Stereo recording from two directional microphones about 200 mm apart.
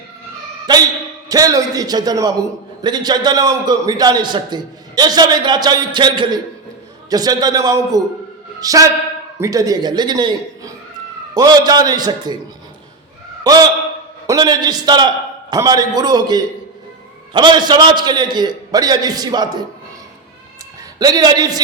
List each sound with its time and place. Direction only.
0.7 s a man's voice: 20° right (ahead or behind)
13.4 s a man's voice: 20° right (ahead or behind)
21.0 s a man's voice: 20° right (ahead or behind)